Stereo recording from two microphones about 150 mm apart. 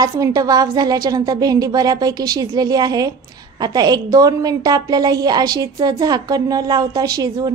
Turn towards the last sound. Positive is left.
turn(degrees=-25)  # may be behind; listen again after turning